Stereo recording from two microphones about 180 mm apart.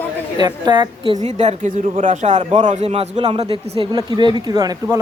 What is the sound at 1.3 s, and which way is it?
Speech, 40° right (ahead or behind).